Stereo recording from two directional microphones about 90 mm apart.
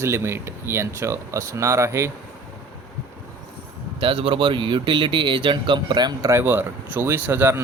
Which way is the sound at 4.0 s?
80° right.